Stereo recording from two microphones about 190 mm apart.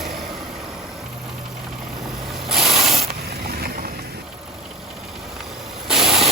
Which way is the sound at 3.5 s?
55° right (ahead or behind).